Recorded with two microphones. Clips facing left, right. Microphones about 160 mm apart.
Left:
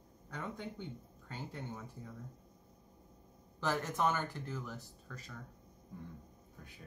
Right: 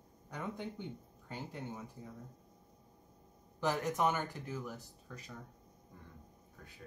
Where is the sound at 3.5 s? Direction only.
15° right (ahead or behind).